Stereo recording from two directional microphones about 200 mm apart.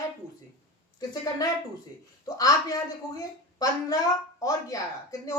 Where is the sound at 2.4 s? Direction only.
15° left (ahead or behind).